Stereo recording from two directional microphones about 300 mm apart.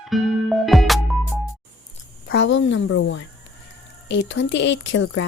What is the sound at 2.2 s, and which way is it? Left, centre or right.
A woman's voice, left.